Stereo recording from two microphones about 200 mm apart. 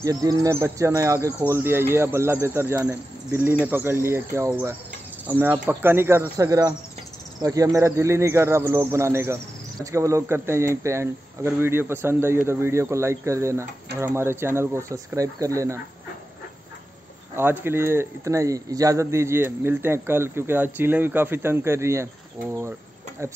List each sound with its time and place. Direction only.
0.0 s a man's voice: 15° right (ahead or behind)
17.4 s a man's voice: 10° right (ahead or behind)